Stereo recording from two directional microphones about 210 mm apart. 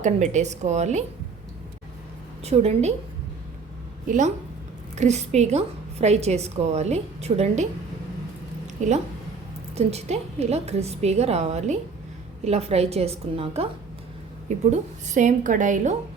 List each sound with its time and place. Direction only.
0.0 s a woman's voice: 35° right (ahead or behind)
2.4 s a woman's voice: 30° right (ahead or behind)
4.9 s a woman's voice: 30° right (ahead or behind)
8.6 s a sound: 35° right (ahead or behind)
9.7 s a woman's voice: 30° right (ahead or behind)